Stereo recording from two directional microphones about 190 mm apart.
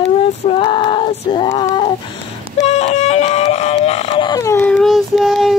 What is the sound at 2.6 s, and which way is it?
Synthetic singing, 35° left (ahead or behind).